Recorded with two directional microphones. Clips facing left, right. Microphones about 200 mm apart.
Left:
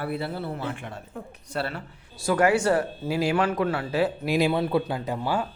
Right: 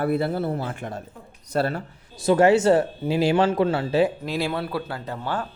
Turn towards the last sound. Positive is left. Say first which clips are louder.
# left 2 dB
turn(degrees=10)  # may be behind; listen again after turning